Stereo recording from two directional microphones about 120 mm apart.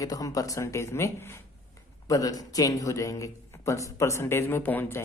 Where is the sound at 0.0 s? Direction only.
30° left (ahead or behind).